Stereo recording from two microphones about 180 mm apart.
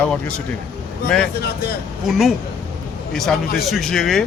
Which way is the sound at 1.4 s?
60° left (ahead or behind).